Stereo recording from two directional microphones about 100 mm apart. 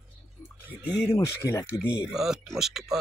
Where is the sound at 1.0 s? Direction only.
35° left (ahead or behind).